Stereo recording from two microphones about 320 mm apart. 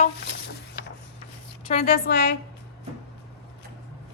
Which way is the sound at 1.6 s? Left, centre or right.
Left.